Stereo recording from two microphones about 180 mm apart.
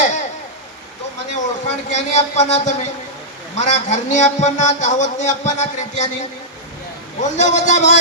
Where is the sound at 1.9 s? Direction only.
40° left (ahead or behind).